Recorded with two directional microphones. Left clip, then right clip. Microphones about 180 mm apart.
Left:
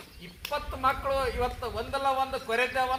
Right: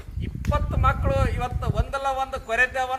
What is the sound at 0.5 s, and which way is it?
Speech, 15° right (ahead or behind).